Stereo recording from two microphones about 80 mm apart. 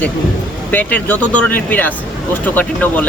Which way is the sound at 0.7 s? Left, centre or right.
Left.